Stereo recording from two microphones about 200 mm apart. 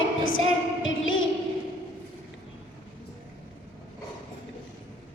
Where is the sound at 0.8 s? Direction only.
75° left (ahead or behind).